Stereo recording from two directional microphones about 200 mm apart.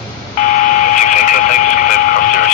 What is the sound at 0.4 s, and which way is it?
Radio, 40° left (ahead or behind).